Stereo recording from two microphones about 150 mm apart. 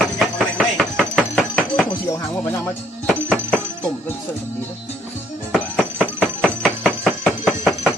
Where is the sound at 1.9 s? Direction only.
20° left (ahead or behind).